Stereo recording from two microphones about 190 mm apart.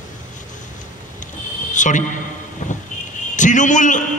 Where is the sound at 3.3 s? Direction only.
40° left (ahead or behind).